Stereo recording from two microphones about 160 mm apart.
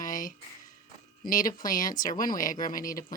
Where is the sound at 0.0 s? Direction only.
55° left (ahead or behind).